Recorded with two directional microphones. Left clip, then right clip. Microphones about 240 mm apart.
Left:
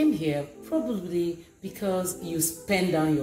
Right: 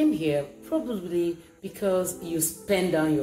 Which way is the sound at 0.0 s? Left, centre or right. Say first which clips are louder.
Right 1 dB; centre.